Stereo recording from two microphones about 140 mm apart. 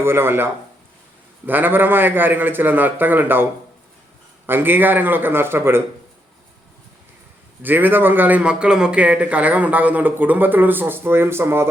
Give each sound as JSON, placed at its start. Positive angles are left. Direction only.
{"t": 0.0, "sound": "a man's voice", "side_deg": -15}
{"t": 4.4, "sound": "a man's voice", "side_deg": -15}
{"t": 7.6, "sound": "a man's voice", "side_deg": -15}